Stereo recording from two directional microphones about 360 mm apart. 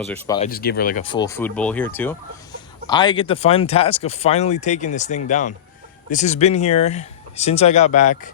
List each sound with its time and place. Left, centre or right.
0.1 s speech: centre
0.3 s speech: left